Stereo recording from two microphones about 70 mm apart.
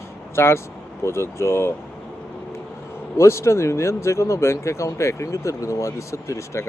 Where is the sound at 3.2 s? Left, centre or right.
Left.